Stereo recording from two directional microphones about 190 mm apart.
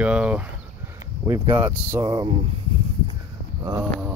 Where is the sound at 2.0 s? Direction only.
30° right (ahead or behind).